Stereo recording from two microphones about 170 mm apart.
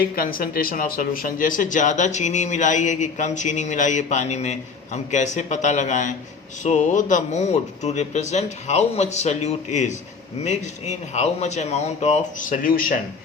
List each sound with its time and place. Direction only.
0.2 s speech: 60° left (ahead or behind)